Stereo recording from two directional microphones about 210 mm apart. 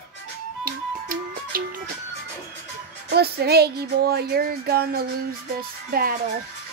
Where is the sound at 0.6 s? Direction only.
45° right (ahead or behind).